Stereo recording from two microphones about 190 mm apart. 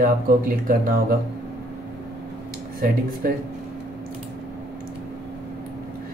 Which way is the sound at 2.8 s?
50° right (ahead or behind).